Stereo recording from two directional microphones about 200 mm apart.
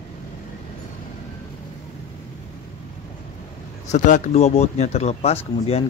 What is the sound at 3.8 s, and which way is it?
Speech, 40° left (ahead or behind).